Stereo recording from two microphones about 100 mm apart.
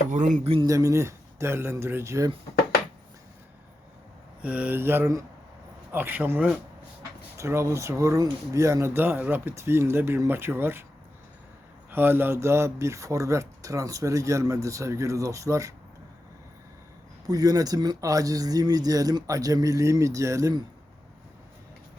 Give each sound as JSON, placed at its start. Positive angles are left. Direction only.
{"t": 0.7, "sound": "speech", "side_deg": -30}
{"t": 4.4, "sound": "speech", "side_deg": -15}
{"t": 7.3, "sound": "speech", "side_deg": -30}
{"t": 11.9, "sound": "speech", "side_deg": -20}
{"t": 17.2, "sound": "speech", "side_deg": -40}